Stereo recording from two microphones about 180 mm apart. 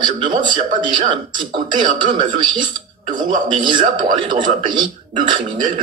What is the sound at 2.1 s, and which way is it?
Speech, 25° right (ahead or behind).